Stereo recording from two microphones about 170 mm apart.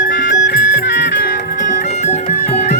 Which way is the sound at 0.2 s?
90° left.